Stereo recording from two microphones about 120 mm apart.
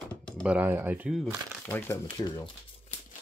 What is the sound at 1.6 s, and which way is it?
Speech, 20° left (ahead or behind).